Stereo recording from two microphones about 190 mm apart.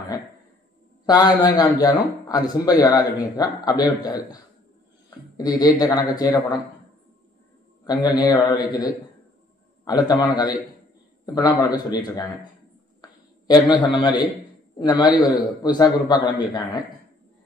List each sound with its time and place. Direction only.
1.0 s a man's voice: 20° left (ahead or behind)
5.4 s a man's voice: 20° left (ahead or behind)
7.8 s a man's voice: 20° left (ahead or behind)
13.0 s a sound: 20° left (ahead or behind)
14.8 s a man's voice: 20° left (ahead or behind)